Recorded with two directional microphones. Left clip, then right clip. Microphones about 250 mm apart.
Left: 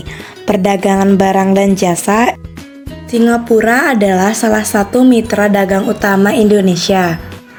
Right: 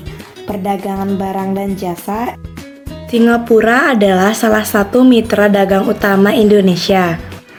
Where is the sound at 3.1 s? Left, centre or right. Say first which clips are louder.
Even; centre.